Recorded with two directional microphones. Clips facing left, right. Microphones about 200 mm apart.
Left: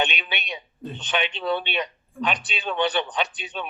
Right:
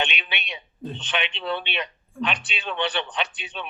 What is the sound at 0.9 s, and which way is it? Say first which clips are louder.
A man's voice: left 4 dB; 40° left (ahead or behind).